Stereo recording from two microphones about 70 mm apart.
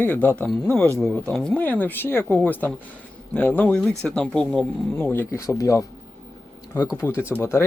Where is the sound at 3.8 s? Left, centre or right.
Centre.